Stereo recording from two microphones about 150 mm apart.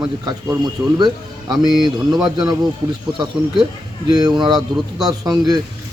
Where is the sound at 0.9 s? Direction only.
30° right (ahead or behind).